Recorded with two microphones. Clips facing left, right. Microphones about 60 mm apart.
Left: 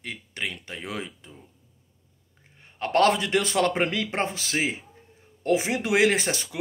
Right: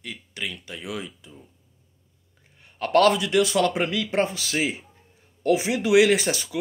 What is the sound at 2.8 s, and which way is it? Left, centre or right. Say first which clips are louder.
Speech: right 2 dB; left.